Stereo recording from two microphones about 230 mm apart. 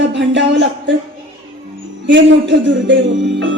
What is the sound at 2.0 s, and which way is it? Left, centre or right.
A woman's voice, right.